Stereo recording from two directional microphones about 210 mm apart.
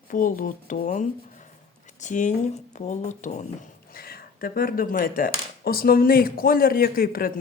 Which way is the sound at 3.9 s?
45° left (ahead or behind).